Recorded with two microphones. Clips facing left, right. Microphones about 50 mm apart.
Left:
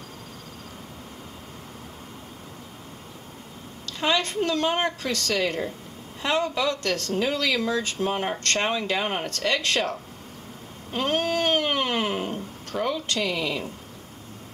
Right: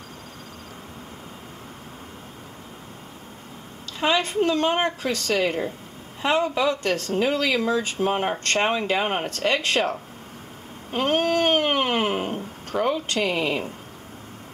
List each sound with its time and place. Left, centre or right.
4.0 s speech: centre
10.9 s cat: right